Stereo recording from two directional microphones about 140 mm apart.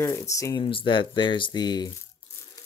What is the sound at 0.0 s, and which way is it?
Speech, 25° left (ahead or behind).